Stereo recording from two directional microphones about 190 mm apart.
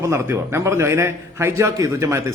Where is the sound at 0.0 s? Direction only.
15° right (ahead or behind).